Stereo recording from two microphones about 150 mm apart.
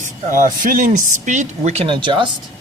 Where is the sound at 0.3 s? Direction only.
60° right (ahead or behind).